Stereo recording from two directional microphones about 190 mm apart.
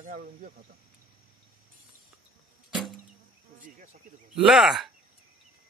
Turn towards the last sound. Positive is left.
turn(degrees=0)  # may be behind; listen again after turning